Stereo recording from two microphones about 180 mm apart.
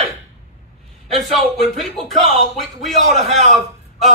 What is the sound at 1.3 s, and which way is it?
A man's voice, centre (ahead or behind).